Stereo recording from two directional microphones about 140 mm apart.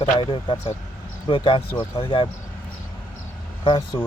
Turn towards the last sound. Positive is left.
turn(degrees=35)  # may be behind; listen again after turning